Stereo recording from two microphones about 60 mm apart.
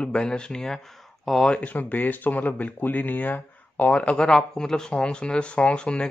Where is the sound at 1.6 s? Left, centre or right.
Left.